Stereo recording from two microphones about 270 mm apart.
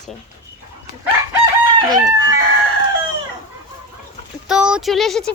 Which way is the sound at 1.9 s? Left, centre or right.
Centre.